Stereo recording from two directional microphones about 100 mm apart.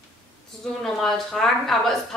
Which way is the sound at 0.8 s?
5° left (ahead or behind).